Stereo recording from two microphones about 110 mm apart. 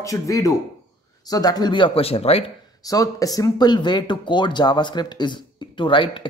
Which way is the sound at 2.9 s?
35° left (ahead or behind).